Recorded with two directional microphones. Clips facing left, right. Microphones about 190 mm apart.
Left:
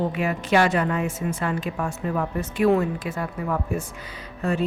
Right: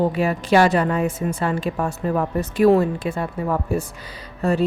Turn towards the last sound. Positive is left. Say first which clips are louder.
# right 4 dB
turn(degrees=-35)  # may be behind; listen again after turning